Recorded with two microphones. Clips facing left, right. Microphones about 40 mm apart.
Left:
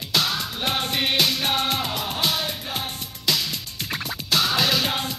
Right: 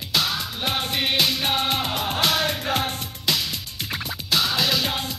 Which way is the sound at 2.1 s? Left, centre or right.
Right.